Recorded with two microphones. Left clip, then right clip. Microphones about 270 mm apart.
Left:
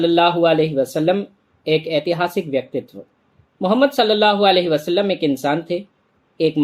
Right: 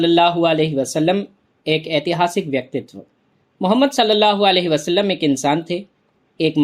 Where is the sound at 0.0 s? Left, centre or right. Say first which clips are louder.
Even; right.